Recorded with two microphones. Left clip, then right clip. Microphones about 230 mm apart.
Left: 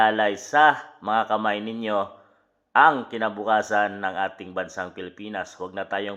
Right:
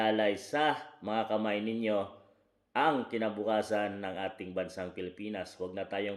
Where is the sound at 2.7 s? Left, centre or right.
Left.